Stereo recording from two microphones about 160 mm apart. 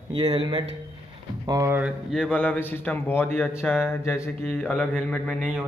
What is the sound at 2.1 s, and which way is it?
A man's voice, 5° left (ahead or behind).